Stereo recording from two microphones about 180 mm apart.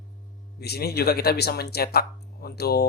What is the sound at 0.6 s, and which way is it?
Speech, 60° left (ahead or behind).